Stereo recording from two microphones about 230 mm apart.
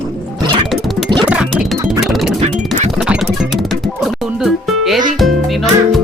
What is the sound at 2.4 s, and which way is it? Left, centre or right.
Music, right.